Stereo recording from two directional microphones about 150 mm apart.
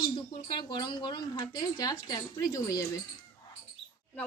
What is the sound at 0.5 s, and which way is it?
Speech, 30° left (ahead or behind).